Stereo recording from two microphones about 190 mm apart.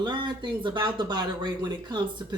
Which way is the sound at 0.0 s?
25° right (ahead or behind).